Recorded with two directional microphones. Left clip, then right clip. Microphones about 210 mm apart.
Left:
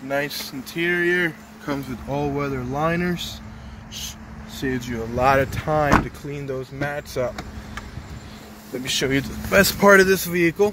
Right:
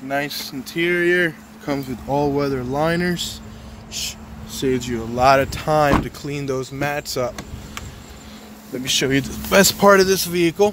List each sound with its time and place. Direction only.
0.1 s speech: 5° right (ahead or behind)
4.6 s speech: 10° right (ahead or behind)
6.0 s speech: 25° right (ahead or behind)
8.8 s speech: 15° right (ahead or behind)
9.8 s speech: centre (ahead or behind)